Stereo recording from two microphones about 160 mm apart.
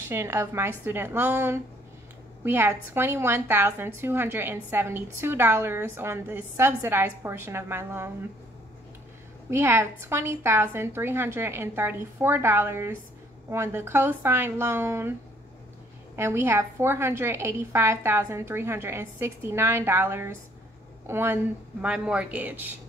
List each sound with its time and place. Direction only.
0.0 s a woman's voice: 15° right (ahead or behind)
9.5 s a woman's voice: 15° right (ahead or behind)
16.2 s a woman's voice: 15° right (ahead or behind)